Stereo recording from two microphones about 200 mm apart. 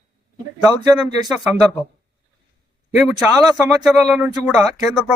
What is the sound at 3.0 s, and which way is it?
Speech, centre (ahead or behind).